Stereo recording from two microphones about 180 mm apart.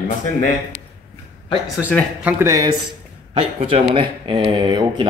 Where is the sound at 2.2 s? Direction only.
15° right (ahead or behind).